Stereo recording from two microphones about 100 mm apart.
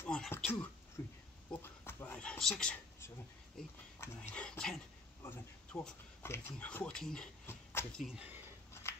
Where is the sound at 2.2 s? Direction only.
5° left (ahead or behind).